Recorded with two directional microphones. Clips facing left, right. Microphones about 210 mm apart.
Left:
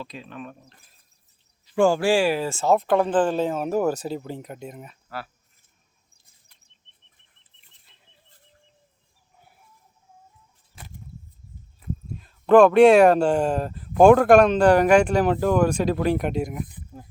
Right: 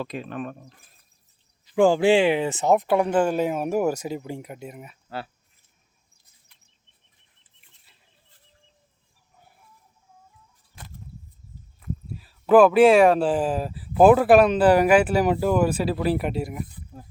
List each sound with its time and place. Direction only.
0.0 s speech: 55° right (ahead or behind)
1.7 s speech: 15° right (ahead or behind)
5.0 s speech: 25° right (ahead or behind)
7.9 s livestock: 5° right (ahead or behind)
12.1 s speech: 5° right (ahead or behind)